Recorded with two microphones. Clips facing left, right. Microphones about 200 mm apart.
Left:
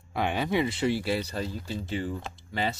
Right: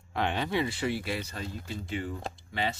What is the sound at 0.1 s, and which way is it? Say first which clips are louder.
Speech: left 2 dB; 10° left (ahead or behind).